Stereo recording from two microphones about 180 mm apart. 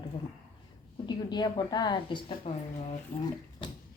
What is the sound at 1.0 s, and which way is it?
A woman's voice, 25° left (ahead or behind).